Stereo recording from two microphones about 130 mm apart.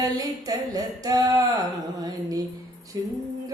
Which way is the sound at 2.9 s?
30° right (ahead or behind).